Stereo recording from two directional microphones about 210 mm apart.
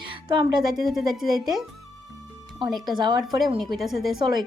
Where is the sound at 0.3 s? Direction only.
20° right (ahead or behind).